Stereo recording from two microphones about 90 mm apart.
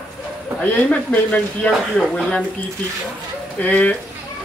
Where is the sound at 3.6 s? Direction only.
15° left (ahead or behind).